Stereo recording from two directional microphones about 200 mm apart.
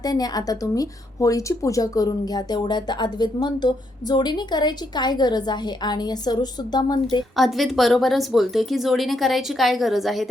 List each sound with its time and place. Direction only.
0.0 s a woman's voice: 20° left (ahead or behind)
7.3 s a woman's voice: centre (ahead or behind)